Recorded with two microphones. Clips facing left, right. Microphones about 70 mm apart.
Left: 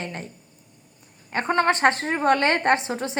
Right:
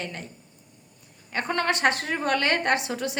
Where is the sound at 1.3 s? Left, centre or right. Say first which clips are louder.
Left 5 dB; left.